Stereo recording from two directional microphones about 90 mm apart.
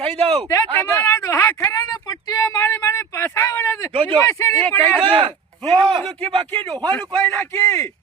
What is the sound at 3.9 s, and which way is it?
Speech, 80° right.